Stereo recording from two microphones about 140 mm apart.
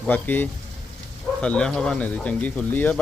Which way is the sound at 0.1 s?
15° left (ahead or behind).